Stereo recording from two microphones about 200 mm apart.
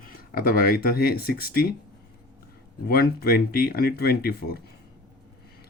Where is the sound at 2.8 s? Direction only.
50° left (ahead or behind).